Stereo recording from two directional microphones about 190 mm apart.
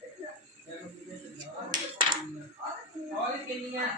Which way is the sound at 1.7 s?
25° right (ahead or behind).